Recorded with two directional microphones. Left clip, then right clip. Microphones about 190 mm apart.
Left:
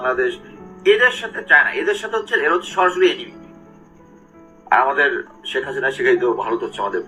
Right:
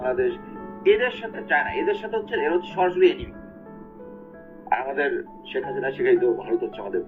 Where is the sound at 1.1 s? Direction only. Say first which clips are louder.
Left 6 dB; 5° right (ahead or behind).